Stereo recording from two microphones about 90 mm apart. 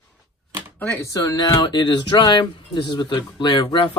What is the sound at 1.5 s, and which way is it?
Speech, 60° left (ahead or behind).